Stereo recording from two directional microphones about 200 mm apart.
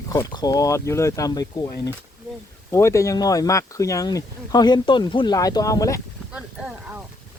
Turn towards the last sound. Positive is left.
turn(degrees=-5)  # may be behind; listen again after turning